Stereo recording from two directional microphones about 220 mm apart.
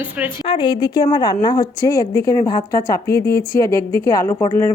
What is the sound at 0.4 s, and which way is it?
A woman's voice, 20° left (ahead or behind).